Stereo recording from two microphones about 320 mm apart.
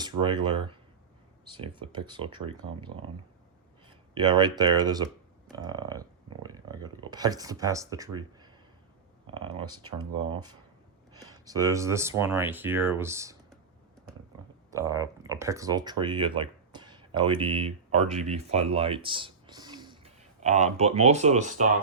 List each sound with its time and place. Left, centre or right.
0.0 s speech: centre
14.7 s speech: centre